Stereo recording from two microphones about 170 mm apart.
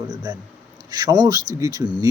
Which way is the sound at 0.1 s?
20° right (ahead or behind).